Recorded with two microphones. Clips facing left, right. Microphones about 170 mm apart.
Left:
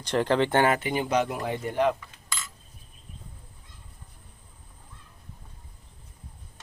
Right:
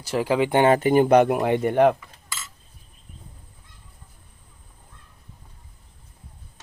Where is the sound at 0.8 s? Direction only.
45° right (ahead or behind).